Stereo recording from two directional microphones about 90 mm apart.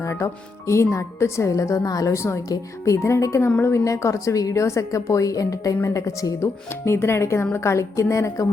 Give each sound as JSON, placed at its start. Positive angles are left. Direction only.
{"t": 0.0, "sound": "music", "side_deg": 35}
{"t": 0.7, "sound": "a woman's voice", "side_deg": 30}